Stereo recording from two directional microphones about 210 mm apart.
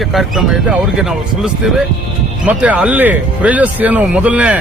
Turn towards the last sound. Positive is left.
turn(degrees=-5)  # may be behind; listen again after turning